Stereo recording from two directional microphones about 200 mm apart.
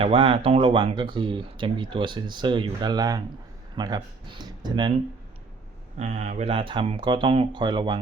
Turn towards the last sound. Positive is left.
turn(degrees=-20)  # may be behind; listen again after turning